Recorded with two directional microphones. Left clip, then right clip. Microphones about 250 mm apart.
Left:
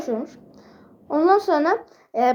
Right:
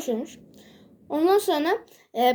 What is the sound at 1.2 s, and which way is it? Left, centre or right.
Speech, right.